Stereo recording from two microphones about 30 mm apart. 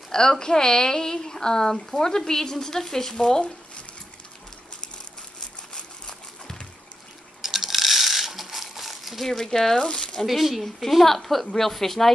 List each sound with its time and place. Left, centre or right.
0.1 s a woman's voice: left
6.0 s horse: left
7.4 s a sound: centre
9.4 s a woman's voice: centre
9.8 s speech: left
10.2 s speech: centre
10.6 s a woman's voice: centre